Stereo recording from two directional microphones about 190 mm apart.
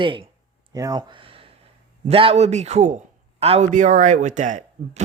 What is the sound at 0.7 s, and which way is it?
Speech, 20° right (ahead or behind).